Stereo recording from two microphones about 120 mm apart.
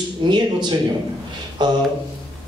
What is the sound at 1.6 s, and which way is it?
Speech, 35° right (ahead or behind).